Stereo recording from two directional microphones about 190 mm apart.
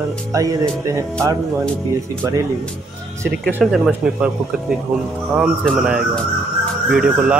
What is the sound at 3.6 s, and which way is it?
Speech, centre (ahead or behind).